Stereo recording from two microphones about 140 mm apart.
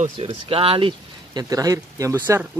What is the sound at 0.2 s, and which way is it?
Speech, 40° right (ahead or behind).